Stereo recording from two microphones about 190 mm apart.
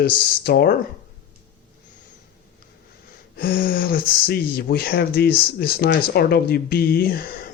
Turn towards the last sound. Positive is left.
turn(degrees=50)  # may be behind; listen again after turning